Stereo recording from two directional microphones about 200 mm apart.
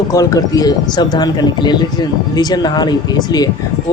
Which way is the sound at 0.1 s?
15° left (ahead or behind).